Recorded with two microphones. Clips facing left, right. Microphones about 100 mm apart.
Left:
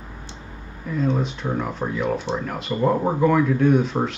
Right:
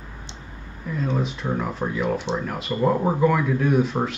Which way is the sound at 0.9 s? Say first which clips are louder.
Left 3 dB; centre (ahead or behind).